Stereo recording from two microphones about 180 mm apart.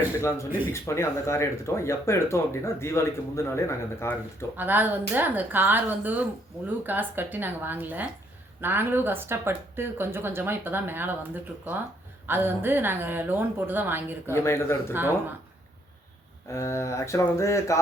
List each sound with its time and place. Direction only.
0.2 s speech: 15° left (ahead or behind)
4.5 s speech: 10° right (ahead or behind)
12.2 s speech: 10° right (ahead or behind)
14.3 s speech: 15° left (ahead or behind)
16.5 s speech: 15° left (ahead or behind)